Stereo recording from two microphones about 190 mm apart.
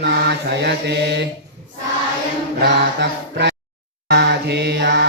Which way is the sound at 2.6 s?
65° right (ahead or behind).